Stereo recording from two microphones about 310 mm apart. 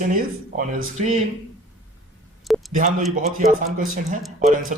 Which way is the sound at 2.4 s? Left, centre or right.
Centre.